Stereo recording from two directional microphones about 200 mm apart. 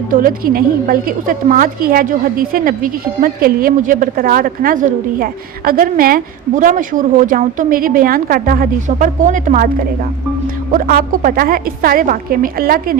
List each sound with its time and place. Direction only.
0.1 s a woman's voice: 45° right (ahead or behind)
10.7 s a woman's voice: 45° right (ahead or behind)